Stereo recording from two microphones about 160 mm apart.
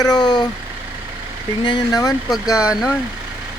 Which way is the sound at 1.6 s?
25° left (ahead or behind).